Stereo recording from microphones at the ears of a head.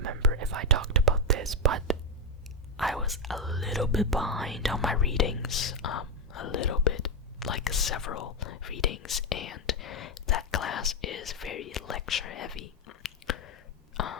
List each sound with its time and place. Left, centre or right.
0.0 s whispering: right
2.7 s whispering: centre
5.1 s whispering: left